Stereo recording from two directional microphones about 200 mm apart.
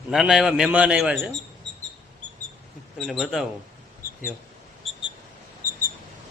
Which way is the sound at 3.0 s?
Centre (ahead or behind).